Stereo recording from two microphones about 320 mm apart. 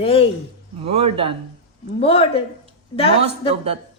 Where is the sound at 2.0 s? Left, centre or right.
Centre.